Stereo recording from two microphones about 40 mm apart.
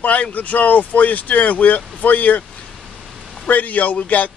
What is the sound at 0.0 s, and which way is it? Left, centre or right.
A man's voice, left.